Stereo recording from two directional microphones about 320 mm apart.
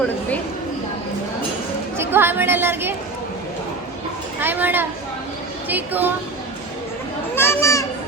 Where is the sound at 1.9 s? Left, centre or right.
Centre.